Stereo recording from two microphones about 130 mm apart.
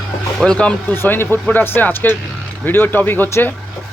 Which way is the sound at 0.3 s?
5° left (ahead or behind).